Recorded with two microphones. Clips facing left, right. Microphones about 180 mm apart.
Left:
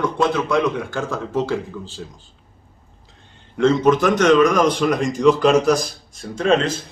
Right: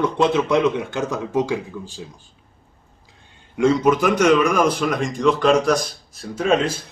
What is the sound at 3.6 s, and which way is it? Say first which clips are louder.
A man's voice: left 1 dB; 10° right (ahead or behind).